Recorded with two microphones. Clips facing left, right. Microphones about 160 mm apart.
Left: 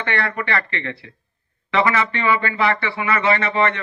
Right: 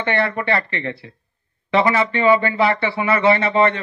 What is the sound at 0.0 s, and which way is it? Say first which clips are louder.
A man's voice: right 4 dB; 30° right (ahead or behind).